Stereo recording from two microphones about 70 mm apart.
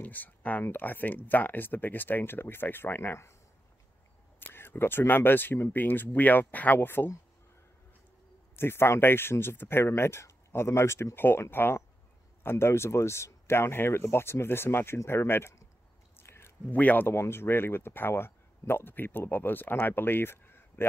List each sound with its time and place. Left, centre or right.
0.0 s speech: left
4.4 s speech: left
8.5 s speech: left
16.2 s a sound: left
16.7 s speech: left
17.1 s speech: left